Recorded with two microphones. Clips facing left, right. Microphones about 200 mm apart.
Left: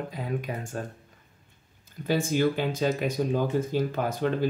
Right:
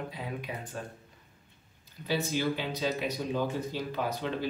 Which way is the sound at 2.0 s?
50° left (ahead or behind).